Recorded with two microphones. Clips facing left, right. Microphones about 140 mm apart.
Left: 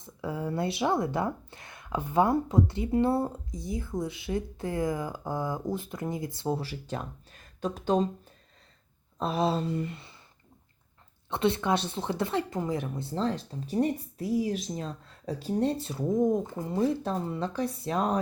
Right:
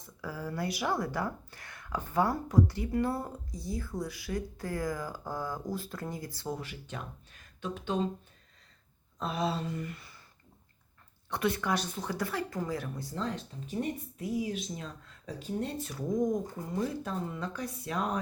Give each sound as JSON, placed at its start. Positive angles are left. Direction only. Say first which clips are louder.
{"t": 0.0, "sound": "speech", "louder": "left 6 dB", "side_deg": 25}
{"t": 9.1, "sound": "speech", "louder": "left 5 dB", "side_deg": 30}
{"t": 11.3, "sound": "speech", "louder": "left 4 dB", "side_deg": 25}